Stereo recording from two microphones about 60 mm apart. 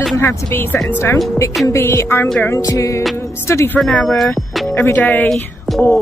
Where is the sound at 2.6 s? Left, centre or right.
Left.